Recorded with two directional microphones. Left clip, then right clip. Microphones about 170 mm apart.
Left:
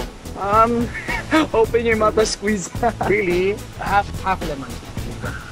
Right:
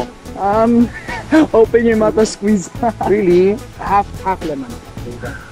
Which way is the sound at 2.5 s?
Centre (ahead or behind).